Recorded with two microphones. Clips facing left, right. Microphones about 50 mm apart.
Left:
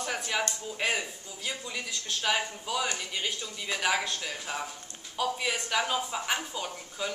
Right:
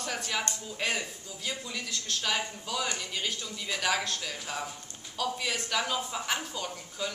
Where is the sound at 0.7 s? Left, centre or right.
Centre.